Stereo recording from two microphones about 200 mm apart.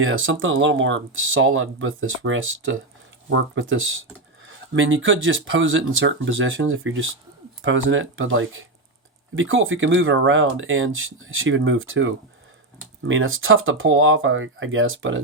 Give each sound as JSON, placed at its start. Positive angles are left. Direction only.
{"t": 0.0, "sound": "speech", "side_deg": -80}